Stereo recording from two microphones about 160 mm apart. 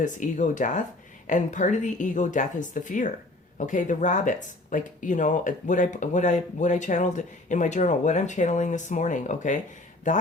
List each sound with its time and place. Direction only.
0.0 s speech: 50° left (ahead or behind)